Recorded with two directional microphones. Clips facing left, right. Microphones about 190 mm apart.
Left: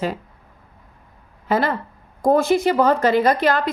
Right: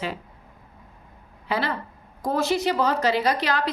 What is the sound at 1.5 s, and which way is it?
A woman's voice, 50° left (ahead or behind).